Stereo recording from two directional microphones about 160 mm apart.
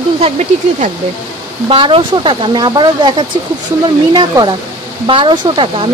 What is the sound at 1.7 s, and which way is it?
Speech, 35° right (ahead or behind).